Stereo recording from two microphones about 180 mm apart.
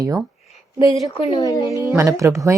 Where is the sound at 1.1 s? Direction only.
30° left (ahead or behind).